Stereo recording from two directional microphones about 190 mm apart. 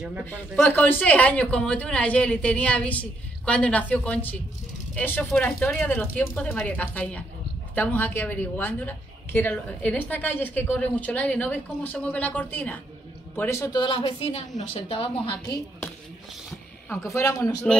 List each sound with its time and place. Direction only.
0.2 s a woman's voice: 10° left (ahead or behind)
17.0 s a woman's voice: 15° left (ahead or behind)